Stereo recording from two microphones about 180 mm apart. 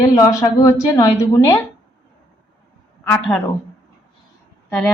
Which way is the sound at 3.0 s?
10° left (ahead or behind).